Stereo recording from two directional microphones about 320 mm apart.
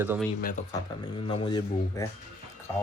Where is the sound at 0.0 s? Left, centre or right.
Centre.